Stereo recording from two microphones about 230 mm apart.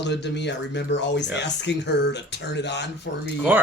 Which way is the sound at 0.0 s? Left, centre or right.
Left.